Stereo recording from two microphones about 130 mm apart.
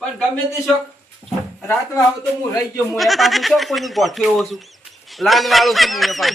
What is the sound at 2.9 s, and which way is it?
A man's voice, centre (ahead or behind).